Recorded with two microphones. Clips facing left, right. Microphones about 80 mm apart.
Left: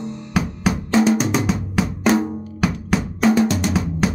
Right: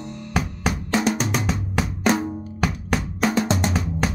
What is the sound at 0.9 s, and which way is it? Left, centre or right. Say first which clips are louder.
Drum: left 6 dB; centre.